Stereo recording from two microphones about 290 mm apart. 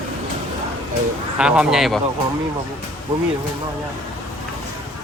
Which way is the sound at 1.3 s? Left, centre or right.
Centre.